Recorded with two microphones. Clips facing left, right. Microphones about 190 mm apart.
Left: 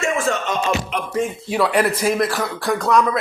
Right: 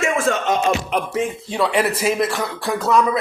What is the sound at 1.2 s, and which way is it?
Speech, centre (ahead or behind).